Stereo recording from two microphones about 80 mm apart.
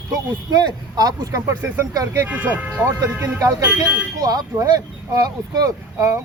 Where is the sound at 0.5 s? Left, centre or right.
Right.